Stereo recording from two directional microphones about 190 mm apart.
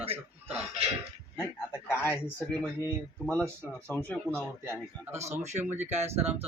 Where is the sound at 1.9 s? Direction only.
10° left (ahead or behind).